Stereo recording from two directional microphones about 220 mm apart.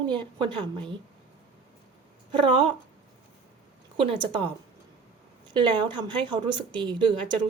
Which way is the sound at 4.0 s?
25° right (ahead or behind).